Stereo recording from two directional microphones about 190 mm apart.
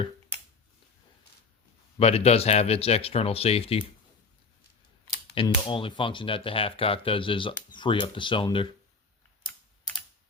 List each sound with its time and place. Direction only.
2.0 s speech: 30° left (ahead or behind)
5.3 s speech: 30° left (ahead or behind)